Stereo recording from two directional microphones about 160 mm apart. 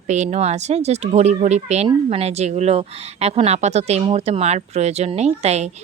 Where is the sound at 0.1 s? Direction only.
45° right (ahead or behind).